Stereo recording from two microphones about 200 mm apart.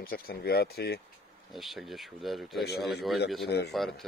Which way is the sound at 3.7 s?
Centre (ahead or behind).